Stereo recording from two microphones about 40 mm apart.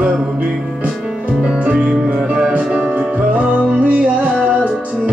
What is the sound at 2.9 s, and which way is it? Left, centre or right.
Music, right.